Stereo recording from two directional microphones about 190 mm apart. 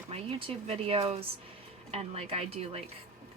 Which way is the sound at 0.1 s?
30° right (ahead or behind).